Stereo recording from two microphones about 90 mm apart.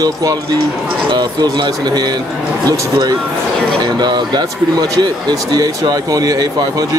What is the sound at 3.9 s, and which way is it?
Speech, 50° right (ahead or behind).